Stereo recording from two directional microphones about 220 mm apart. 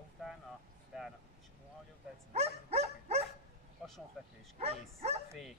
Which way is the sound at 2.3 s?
30° right (ahead or behind).